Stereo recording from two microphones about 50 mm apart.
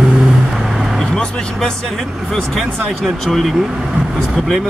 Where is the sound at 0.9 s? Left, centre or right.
Centre.